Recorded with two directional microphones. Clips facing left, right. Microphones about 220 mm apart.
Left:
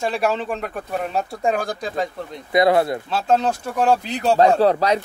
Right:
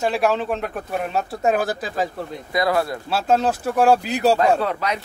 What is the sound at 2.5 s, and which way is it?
Speech, 25° left (ahead or behind).